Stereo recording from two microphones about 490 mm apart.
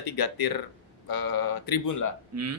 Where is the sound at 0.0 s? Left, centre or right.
Left.